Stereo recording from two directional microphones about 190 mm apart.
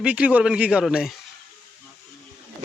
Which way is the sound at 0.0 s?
5° right (ahead or behind).